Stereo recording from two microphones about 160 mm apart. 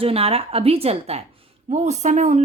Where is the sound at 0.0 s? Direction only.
40° right (ahead or behind).